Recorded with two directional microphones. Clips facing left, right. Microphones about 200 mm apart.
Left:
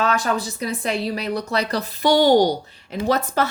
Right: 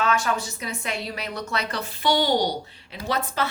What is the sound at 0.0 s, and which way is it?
A woman's voice, 35° left (ahead or behind).